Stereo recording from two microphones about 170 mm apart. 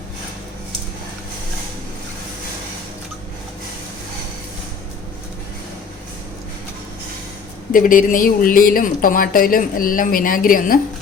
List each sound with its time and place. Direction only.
7.7 s speech: 55° left (ahead or behind)